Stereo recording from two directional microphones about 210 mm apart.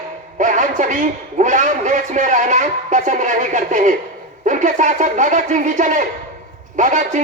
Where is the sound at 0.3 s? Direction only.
35° right (ahead or behind).